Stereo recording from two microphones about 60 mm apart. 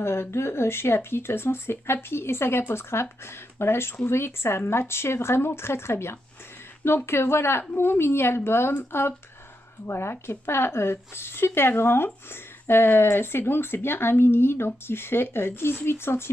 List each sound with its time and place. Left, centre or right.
0.0 s a woman's voice: left